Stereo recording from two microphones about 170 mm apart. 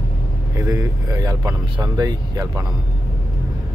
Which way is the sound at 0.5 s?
20° right (ahead or behind).